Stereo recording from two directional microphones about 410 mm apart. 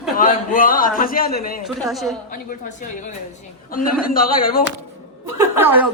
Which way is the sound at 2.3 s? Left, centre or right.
Centre.